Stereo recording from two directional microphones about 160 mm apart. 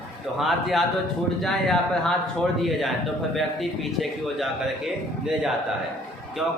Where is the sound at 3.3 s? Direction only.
Centre (ahead or behind).